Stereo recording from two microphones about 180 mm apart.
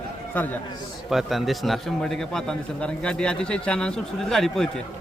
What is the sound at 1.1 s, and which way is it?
A man's voice, centre (ahead or behind).